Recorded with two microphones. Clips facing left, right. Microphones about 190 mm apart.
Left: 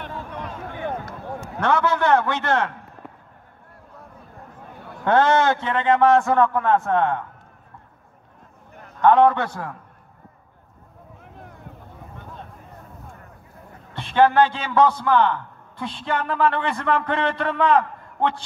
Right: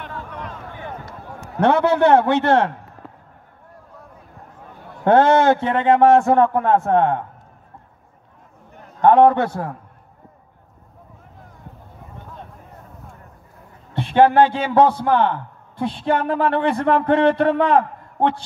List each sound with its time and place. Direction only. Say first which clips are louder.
1.6 s a man's voice: right 6 dB; 60° right (ahead or behind)
5.0 s a man's voice: right 4 dB; 55° right (ahead or behind)
9.0 s a man's voice: right 3 dB; 50° right (ahead or behind)
13.9 s a man's voice: right 3 dB; 60° right (ahead or behind)